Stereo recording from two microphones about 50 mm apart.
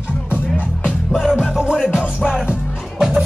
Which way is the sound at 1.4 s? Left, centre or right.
Centre.